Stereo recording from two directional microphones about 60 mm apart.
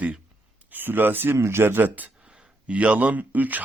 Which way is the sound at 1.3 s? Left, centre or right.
Right.